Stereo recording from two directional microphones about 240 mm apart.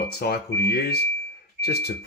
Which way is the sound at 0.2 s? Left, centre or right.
Left.